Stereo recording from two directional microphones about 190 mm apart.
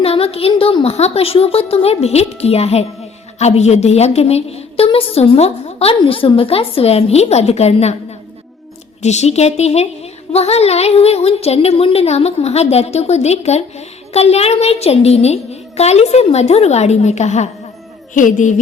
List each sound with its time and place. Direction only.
0.0 s a woman's voice: 30° left (ahead or behind)
9.0 s a woman's voice: 35° left (ahead or behind)